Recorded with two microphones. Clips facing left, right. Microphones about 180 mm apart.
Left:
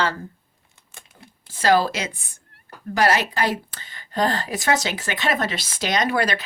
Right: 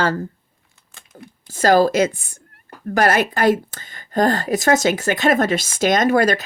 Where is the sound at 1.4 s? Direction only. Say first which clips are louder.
Right 4 dB; 45° right (ahead or behind).